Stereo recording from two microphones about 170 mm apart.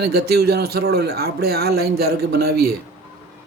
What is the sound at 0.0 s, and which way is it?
Speech, 65° right (ahead or behind).